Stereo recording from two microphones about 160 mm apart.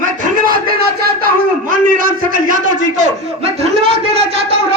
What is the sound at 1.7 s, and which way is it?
Speech, 60° right (ahead or behind).